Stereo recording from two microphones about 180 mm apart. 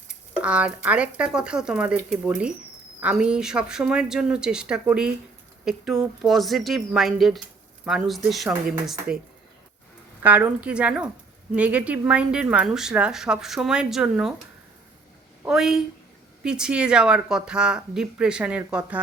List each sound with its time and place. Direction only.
0.4 s speech: 5° right (ahead or behind)
10.2 s speech: 10° right (ahead or behind)
15.4 s speech: 5° right (ahead or behind)